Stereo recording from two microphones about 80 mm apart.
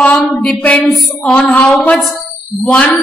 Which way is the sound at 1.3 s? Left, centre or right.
Centre.